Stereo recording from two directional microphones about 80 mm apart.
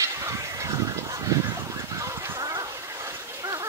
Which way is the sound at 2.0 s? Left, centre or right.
Right.